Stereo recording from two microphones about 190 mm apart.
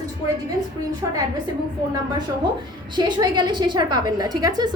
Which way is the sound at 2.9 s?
20° right (ahead or behind).